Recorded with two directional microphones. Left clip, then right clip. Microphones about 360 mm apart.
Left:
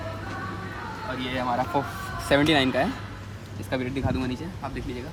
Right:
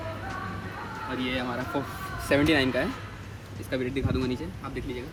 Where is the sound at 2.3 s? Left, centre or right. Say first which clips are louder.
Left 2 dB; left.